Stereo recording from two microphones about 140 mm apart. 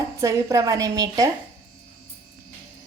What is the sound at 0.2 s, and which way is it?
Speech, 20° right (ahead or behind).